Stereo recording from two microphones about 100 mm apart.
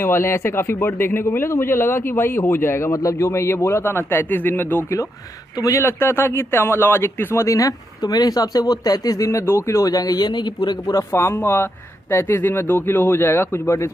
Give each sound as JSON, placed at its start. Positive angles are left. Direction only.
{"t": 0.0, "sound": "a man's voice", "side_deg": 25}
{"t": 11.1, "sound": "a man's voice", "side_deg": 25}